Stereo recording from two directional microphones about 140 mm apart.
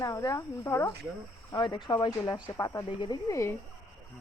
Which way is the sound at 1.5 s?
35° left (ahead or behind).